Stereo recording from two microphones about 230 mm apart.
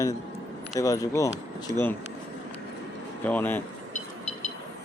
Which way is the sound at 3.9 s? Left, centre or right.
Left.